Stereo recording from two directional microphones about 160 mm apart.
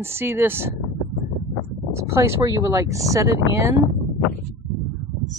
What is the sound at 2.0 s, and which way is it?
Speech, 15° right (ahead or behind).